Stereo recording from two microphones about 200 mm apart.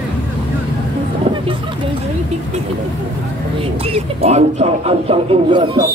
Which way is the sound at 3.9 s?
30° right (ahead or behind).